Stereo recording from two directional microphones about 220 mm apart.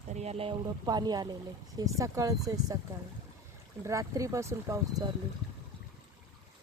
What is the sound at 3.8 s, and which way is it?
Speech, 15° right (ahead or behind).